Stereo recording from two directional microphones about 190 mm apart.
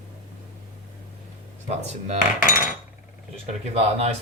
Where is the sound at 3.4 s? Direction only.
35° right (ahead or behind).